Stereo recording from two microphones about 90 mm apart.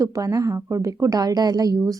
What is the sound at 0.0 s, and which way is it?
A woman's voice, 40° right (ahead or behind).